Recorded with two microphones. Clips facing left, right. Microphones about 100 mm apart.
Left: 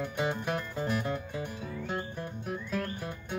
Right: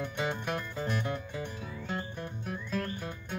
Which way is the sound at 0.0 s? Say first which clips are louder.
Left 2 dB; 5° left (ahead or behind).